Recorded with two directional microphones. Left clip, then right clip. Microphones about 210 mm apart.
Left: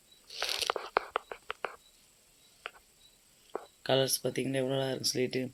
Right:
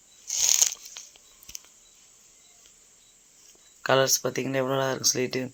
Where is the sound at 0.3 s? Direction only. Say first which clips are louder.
Right 10 dB; 40° right (ahead or behind).